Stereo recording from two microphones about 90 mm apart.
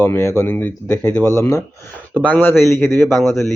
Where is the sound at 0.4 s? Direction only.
25° left (ahead or behind).